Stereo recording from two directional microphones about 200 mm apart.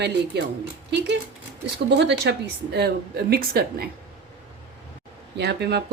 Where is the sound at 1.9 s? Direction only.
60° right (ahead or behind).